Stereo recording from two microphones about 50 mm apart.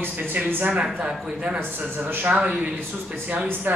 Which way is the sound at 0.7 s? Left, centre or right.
Right.